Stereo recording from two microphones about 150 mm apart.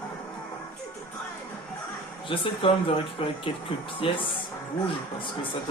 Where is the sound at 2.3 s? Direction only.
35° left (ahead or behind).